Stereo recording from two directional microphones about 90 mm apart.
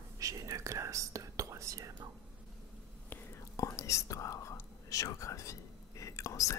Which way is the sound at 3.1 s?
30° left (ahead or behind).